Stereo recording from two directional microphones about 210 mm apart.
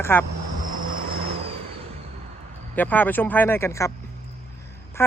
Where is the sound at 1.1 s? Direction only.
25° right (ahead or behind).